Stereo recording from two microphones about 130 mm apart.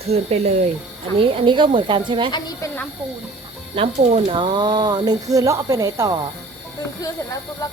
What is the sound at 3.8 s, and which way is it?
Speech, 45° right (ahead or behind).